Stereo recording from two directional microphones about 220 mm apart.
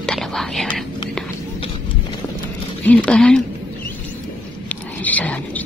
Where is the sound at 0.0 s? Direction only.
Centre (ahead or behind).